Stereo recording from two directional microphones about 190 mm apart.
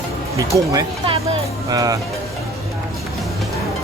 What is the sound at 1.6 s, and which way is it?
Speech, 20° right (ahead or behind).